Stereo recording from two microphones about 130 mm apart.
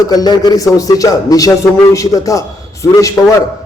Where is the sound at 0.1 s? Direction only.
30° left (ahead or behind).